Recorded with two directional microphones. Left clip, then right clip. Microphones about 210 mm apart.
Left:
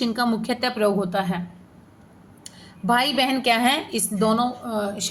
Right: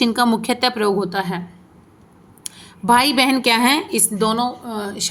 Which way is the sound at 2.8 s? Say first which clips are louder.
Right 6 dB; 50° right (ahead or behind).